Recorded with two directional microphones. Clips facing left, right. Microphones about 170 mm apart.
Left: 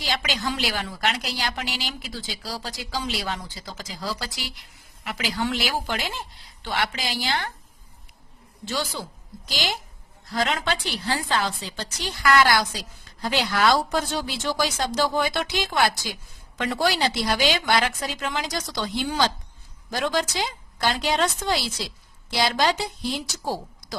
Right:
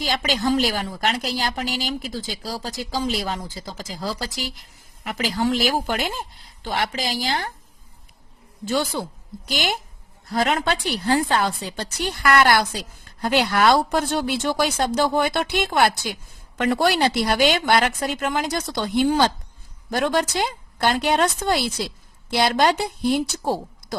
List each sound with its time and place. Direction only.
0.2 s a woman's voice: 45° right (ahead or behind)
8.6 s speech: 55° right (ahead or behind)